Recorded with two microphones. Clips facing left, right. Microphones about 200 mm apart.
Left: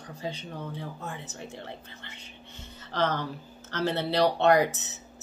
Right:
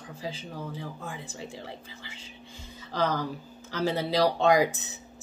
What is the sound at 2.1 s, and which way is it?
Whispering, 90° right.